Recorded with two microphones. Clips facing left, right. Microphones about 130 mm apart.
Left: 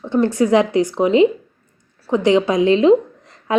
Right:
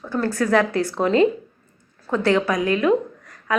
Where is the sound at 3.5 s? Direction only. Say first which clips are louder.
Left 6 dB; 25° left (ahead or behind).